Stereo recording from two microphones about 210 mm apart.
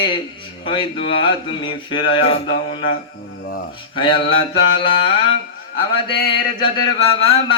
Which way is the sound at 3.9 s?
25° left (ahead or behind).